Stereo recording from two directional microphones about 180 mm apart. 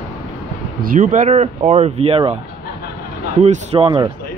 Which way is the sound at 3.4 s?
40° right (ahead or behind).